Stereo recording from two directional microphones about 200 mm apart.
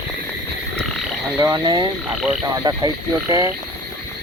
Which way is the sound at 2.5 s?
20° right (ahead or behind).